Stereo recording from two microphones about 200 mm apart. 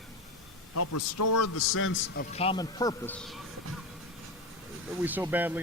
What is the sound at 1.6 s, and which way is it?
Speech, 90° left.